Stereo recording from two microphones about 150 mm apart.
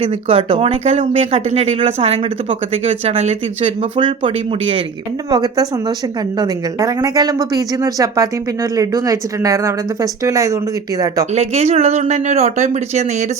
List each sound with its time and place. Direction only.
0.0 s speech: 35° right (ahead or behind)
5.3 s speech: 25° right (ahead or behind)
11.3 s speech: 45° right (ahead or behind)